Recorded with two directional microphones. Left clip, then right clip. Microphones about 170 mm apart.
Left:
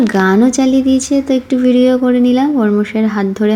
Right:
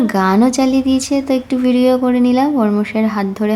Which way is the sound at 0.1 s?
15° left (ahead or behind).